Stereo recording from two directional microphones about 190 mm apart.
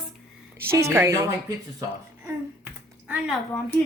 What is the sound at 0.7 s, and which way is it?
Speech, 15° right (ahead or behind).